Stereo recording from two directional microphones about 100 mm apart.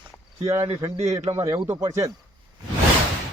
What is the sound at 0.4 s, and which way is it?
A man's voice, 25° right (ahead or behind).